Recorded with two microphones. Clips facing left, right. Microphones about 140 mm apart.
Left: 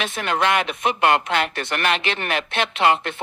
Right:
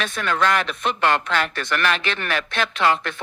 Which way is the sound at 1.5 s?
30° left (ahead or behind).